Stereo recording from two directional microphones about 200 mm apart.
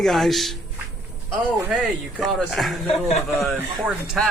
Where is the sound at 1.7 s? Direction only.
Centre (ahead or behind).